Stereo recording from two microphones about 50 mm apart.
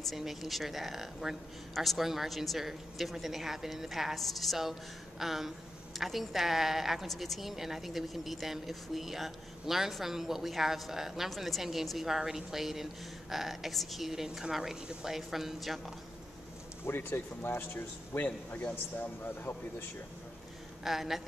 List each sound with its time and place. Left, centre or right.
0.0 s a woman's voice: centre
16.9 s a man's voice: left
20.8 s a woman's voice: centre